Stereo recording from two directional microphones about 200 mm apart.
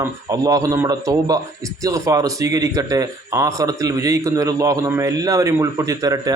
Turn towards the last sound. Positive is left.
turn(degrees=-15)  # may be behind; listen again after turning